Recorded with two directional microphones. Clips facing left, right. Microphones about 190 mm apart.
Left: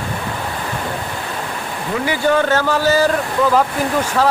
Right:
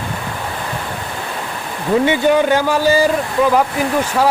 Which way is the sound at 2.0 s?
15° right (ahead or behind).